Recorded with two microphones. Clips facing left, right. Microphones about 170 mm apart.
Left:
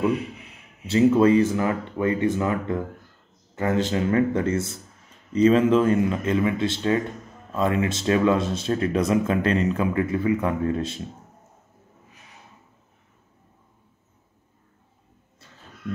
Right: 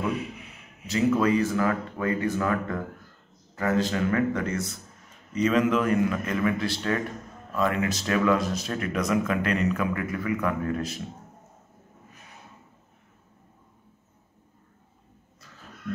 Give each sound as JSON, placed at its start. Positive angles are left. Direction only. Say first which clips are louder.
{"t": 0.8, "sound": "speech", "louder": "left 6 dB", "side_deg": 30}